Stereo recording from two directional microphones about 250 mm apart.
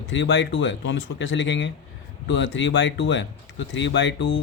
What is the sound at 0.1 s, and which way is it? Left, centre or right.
Speech, left.